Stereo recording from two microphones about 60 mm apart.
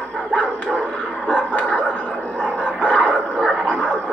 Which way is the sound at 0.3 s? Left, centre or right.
Centre.